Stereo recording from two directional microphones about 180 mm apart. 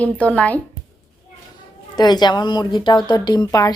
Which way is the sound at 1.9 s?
25° left (ahead or behind).